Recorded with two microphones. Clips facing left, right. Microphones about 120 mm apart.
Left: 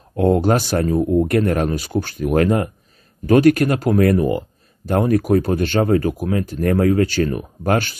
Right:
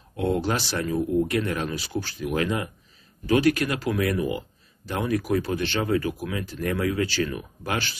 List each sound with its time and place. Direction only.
0.1 s speech: 45° left (ahead or behind)